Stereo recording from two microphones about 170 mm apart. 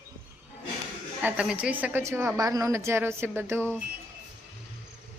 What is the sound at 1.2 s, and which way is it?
A woman's voice, 5° right (ahead or behind).